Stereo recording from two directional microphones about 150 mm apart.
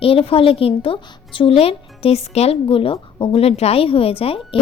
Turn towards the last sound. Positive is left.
turn(degrees=40)  # may be behind; listen again after turning